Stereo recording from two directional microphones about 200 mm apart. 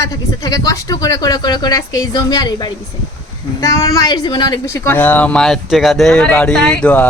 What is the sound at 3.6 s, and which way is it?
Speech, 15° left (ahead or behind).